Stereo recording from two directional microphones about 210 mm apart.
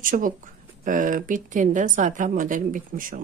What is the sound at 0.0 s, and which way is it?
Speech, 40° right (ahead or behind).